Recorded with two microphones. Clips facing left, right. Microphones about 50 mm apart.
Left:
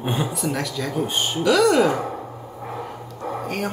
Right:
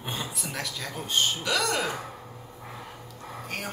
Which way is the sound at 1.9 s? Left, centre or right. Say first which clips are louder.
Left 11 dB; left.